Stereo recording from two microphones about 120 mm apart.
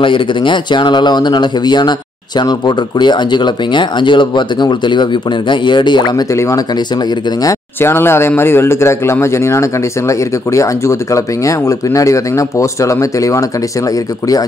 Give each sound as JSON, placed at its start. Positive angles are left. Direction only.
{"t": 0.0, "sound": "speech", "side_deg": 45}
{"t": 6.3, "sound": "a man's voice", "side_deg": 25}